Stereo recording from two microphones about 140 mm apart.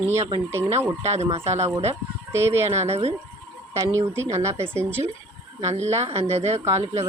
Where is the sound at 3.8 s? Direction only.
20° right (ahead or behind).